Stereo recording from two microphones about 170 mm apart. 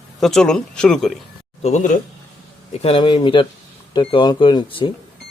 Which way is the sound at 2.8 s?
30° left (ahead or behind).